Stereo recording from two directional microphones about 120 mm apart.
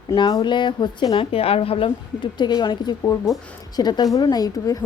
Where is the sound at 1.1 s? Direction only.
55° left (ahead or behind); by 4.7 s 30° left (ahead or behind).